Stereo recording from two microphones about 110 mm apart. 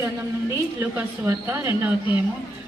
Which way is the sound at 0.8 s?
20° right (ahead or behind).